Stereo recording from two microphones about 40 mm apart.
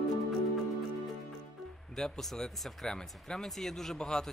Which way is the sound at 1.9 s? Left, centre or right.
Centre.